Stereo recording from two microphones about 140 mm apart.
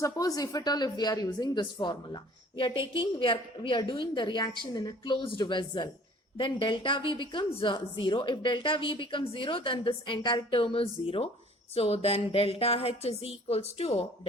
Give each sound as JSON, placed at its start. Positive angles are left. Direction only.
{"t": 0.0, "sound": "a woman's voice", "side_deg": 25}